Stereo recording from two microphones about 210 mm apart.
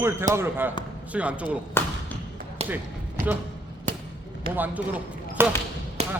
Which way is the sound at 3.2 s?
40° right (ahead or behind).